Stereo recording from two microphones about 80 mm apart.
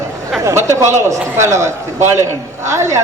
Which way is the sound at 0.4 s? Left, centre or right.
Right.